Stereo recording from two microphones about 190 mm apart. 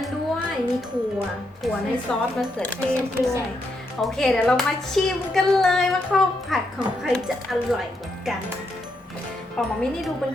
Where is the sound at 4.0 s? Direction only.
Centre (ahead or behind).